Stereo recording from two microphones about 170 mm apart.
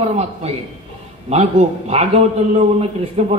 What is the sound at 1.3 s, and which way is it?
A man's voice, 40° right (ahead or behind).